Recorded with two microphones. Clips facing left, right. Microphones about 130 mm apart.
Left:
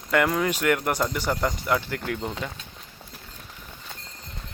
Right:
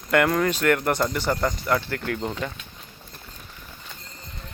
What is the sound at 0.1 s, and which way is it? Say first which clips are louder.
Speech: right 2 dB; 5° left (ahead or behind).